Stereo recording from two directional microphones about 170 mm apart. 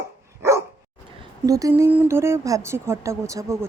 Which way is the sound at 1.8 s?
15° right (ahead or behind).